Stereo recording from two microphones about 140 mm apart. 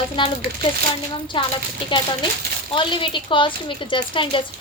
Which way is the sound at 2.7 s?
35° left (ahead or behind).